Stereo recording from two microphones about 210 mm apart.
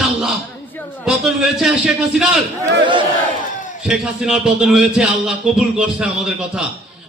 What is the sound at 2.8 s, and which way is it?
Speech, 25° right (ahead or behind).